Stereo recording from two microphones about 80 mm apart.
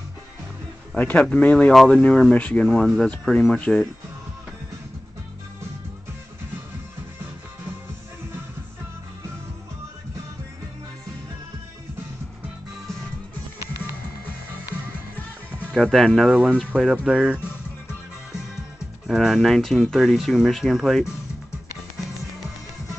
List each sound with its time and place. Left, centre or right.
0.9 s speech: centre
15.7 s speech: centre
16.7 s speech: centre
19.0 s speech: centre